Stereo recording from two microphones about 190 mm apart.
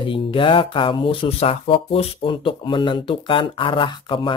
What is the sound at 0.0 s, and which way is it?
Speech, 25° left (ahead or behind).